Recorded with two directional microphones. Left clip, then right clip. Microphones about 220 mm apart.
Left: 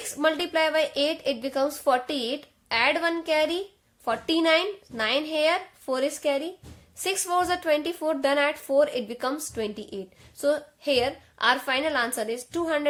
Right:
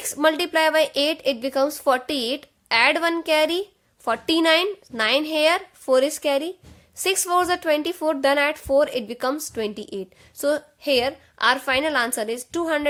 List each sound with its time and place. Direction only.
0.1 s a woman's voice: 35° right (ahead or behind)